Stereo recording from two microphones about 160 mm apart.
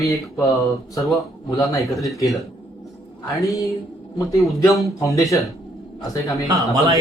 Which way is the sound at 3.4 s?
20° left (ahead or behind).